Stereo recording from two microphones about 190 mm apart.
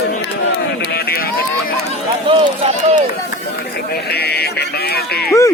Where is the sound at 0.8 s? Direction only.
55° left (ahead or behind).